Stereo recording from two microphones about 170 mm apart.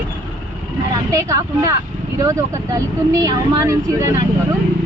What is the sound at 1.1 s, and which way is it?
Speech, 20° right (ahead or behind).